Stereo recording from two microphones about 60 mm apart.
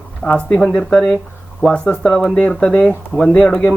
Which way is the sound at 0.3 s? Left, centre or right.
Centre.